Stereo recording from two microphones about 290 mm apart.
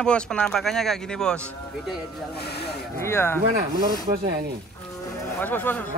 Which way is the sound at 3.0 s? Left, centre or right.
Centre.